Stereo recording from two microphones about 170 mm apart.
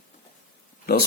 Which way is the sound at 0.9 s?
65° left (ahead or behind).